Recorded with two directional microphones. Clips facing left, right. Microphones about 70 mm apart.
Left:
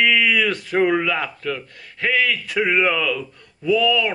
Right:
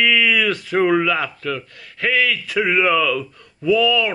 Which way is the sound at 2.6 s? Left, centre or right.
Centre.